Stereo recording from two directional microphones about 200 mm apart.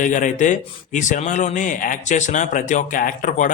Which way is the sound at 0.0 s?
40° left (ahead or behind).